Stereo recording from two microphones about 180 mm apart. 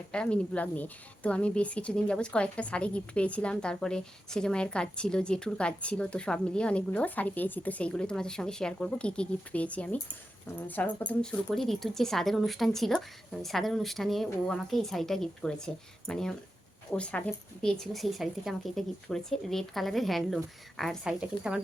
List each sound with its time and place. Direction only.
0.1 s speech: 5° left (ahead or behind)